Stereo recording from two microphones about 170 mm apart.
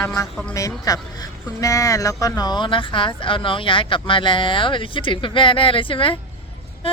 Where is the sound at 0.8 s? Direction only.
20° left (ahead or behind).